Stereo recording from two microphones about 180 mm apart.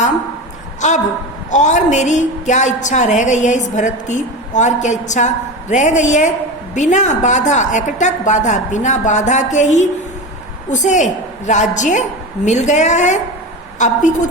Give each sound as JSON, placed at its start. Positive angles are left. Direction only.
{"t": 0.8, "sound": "a woman's voice", "side_deg": 40}